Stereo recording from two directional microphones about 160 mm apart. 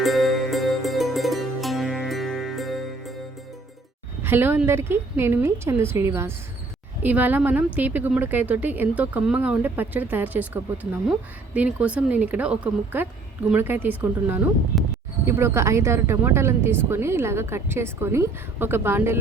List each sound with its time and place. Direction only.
0.0 s music: centre (ahead or behind)
4.2 s a woman's voice: 15° right (ahead or behind)
14.7 s a sound: centre (ahead or behind)
15.3 s a woman's voice: 15° right (ahead or behind)